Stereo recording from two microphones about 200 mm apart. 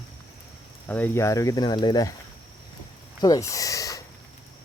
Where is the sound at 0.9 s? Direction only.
10° left (ahead or behind).